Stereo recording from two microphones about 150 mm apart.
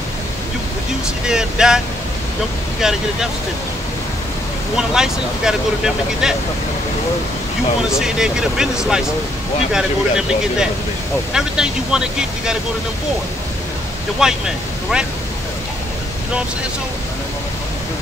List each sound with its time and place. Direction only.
1.2 s speech: 5° right (ahead or behind)
2.8 s speech: 5° right (ahead or behind)
4.7 s speech: 5° right (ahead or behind)
8.0 s speech: 5° right (ahead or behind)
14.2 s speech: 5° right (ahead or behind)